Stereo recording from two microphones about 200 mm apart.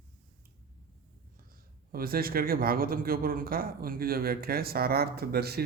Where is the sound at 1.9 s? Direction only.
45° right (ahead or behind).